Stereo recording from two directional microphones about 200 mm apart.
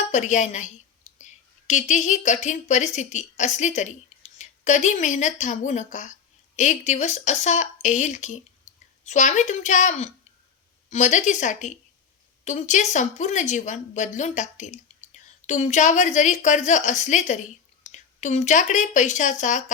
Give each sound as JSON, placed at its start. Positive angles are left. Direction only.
{"t": 0.1, "sound": "a woman's voice", "side_deg": 35}
{"t": 8.7, "sound": "a sound", "side_deg": 35}
{"t": 9.0, "sound": "a woman's voice", "side_deg": 35}